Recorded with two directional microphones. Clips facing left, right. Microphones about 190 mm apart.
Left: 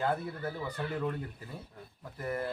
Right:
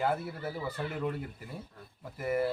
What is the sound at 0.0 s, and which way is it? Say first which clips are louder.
Speech: right 1 dB; 10° right (ahead or behind).